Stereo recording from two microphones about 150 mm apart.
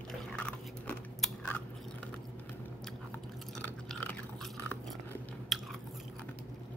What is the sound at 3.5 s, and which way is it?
Chewing, 5° left (ahead or behind).